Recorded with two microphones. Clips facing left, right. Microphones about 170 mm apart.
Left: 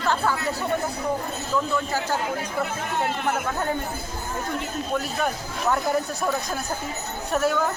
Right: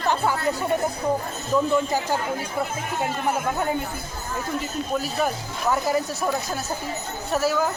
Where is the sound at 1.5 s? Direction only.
15° right (ahead or behind).